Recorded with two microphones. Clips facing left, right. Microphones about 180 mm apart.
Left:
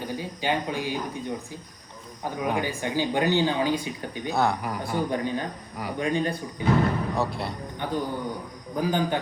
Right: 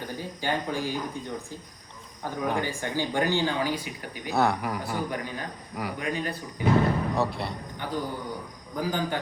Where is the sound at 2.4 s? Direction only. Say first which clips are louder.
Left 1 dB; 15° left (ahead or behind).